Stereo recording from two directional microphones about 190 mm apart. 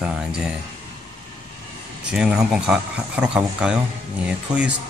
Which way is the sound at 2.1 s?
5° right (ahead or behind).